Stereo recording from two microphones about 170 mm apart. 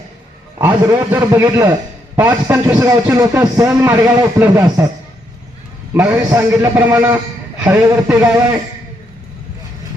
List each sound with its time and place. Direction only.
0.7 s a man's voice: 20° right (ahead or behind)
5.9 s a man's voice: 10° right (ahead or behind)